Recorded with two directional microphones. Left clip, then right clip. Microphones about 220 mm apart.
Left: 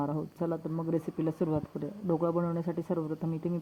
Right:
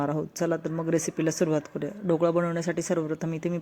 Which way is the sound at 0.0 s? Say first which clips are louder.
Right 6 dB; 30° right (ahead or behind).